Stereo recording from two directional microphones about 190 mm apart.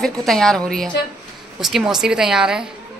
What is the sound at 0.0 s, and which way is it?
A woman's voice, centre (ahead or behind).